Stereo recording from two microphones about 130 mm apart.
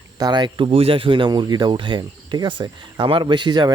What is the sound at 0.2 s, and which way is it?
Speech, 35° right (ahead or behind).